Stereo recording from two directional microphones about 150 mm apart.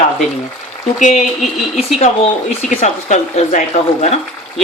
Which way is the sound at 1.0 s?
55° left (ahead or behind).